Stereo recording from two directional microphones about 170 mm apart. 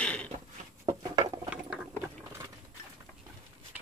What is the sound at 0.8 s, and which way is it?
Patter, 20° right (ahead or behind).